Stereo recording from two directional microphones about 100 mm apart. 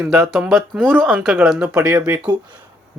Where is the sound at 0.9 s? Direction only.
10° right (ahead or behind).